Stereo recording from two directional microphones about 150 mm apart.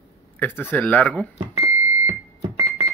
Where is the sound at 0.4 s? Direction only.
15° left (ahead or behind).